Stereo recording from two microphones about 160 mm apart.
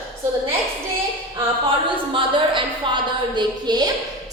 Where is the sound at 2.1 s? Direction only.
30° right (ahead or behind).